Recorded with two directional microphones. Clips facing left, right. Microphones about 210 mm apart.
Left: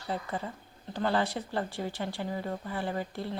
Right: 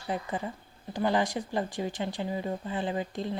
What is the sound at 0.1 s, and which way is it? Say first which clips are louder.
Speech: right 2 dB; 15° right (ahead or behind).